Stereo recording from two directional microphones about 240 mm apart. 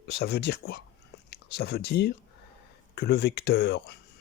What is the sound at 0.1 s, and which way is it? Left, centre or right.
Speech, left.